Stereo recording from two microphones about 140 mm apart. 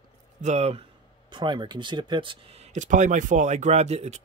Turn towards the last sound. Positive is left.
turn(degrees=-55)  # may be behind; listen again after turning